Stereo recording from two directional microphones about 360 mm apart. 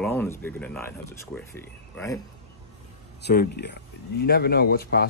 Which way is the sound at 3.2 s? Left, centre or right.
Left.